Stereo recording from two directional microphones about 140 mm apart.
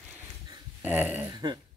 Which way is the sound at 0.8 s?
10° right (ahead or behind).